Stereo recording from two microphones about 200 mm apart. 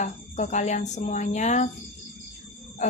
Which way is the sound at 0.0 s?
35° left (ahead or behind).